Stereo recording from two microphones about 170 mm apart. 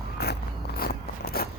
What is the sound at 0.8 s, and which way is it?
Biting, 65° left (ahead or behind).